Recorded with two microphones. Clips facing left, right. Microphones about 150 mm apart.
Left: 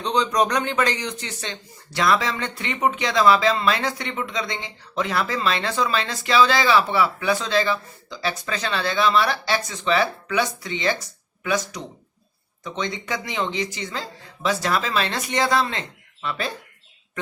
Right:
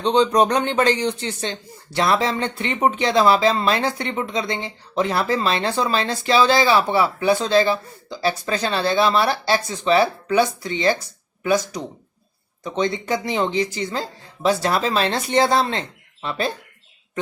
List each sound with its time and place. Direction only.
0.0 s speech: 30° right (ahead or behind)